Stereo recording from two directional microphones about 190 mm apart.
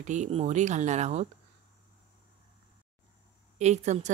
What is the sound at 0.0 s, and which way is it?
A woman's voice, 40° right (ahead or behind).